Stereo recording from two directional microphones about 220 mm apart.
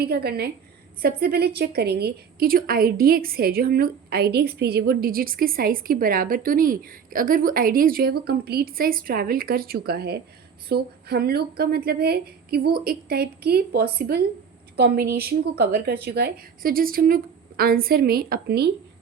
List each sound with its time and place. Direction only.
0.0 s a woman's voice: 45° right (ahead or behind)